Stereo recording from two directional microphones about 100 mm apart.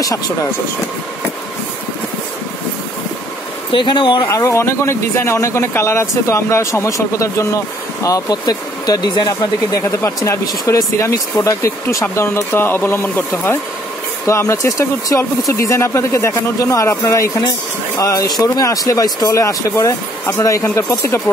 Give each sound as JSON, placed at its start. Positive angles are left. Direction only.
{"t": 3.7, "sound": "speech", "side_deg": 55}
{"t": 4.3, "sound": "speech", "side_deg": 30}